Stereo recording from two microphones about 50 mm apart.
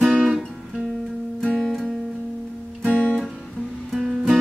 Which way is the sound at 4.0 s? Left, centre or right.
Centre.